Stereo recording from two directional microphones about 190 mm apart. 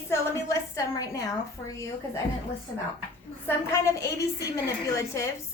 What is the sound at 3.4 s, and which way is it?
A woman's voice, 15° left (ahead or behind).